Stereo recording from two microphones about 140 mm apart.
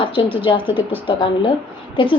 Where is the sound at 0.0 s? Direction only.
40° left (ahead or behind).